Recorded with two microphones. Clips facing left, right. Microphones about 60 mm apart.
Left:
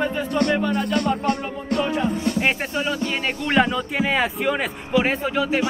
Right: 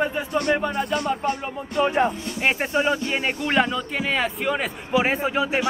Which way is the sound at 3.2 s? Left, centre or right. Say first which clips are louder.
Left 3 dB; centre.